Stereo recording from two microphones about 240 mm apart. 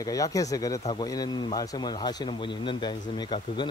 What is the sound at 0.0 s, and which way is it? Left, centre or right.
Speech, centre.